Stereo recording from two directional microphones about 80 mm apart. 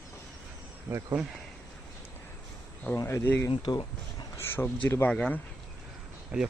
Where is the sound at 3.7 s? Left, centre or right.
Left.